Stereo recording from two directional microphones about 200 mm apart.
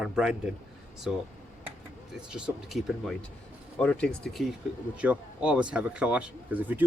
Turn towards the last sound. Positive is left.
turn(degrees=-10)  # may be behind; listen again after turning